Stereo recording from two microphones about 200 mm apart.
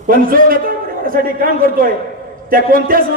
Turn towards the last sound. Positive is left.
turn(degrees=-45)  # may be behind; listen again after turning